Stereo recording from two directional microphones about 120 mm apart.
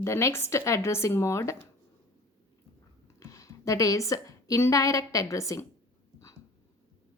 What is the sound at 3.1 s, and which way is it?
A woman's voice, 25° left (ahead or behind).